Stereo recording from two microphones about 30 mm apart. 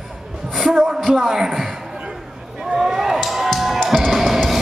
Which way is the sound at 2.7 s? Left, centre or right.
Centre.